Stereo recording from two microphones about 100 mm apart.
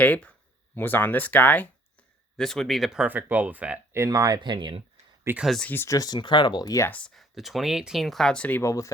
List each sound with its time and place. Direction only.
0.0 s speech: 15° left (ahead or behind)
2.4 s speech: 5° left (ahead or behind)
3.1 s speech: 20° right (ahead or behind)
3.9 s speech: 35° right (ahead or behind)
4.4 s speech: 50° right (ahead or behind)
5.3 s speech: 25° right (ahead or behind)
5.7 s speech: 25° left (ahead or behind)
6.0 s speech: 45° left (ahead or behind)
6.9 s speech: 5° left (ahead or behind)
8.6 s speech: 35° left (ahead or behind)